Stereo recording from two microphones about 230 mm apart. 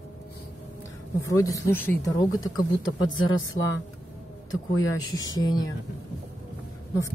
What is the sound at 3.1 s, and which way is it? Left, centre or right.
Speech, left.